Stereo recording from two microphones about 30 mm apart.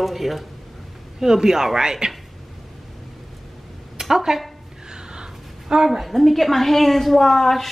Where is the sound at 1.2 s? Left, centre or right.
Centre.